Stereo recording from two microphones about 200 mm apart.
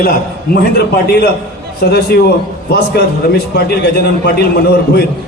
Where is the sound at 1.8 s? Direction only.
55° left (ahead or behind).